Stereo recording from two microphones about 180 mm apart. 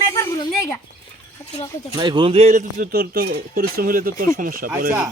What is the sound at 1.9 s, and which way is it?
Speech, 25° right (ahead or behind).